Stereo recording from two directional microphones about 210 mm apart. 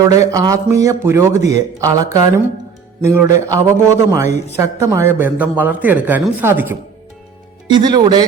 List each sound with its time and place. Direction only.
0.3 s a man's voice: 15° right (ahead or behind)